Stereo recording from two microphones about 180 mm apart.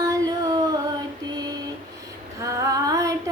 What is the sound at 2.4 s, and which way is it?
Female singing, 20° right (ahead or behind).